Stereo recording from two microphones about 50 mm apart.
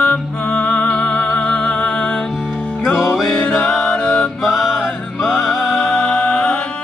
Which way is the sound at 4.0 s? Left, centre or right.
Left.